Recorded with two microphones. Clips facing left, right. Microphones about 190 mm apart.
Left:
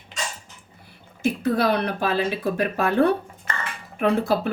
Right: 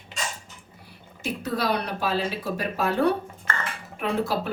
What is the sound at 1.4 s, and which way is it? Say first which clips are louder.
Speech: left 4 dB; 55° left (ahead or behind).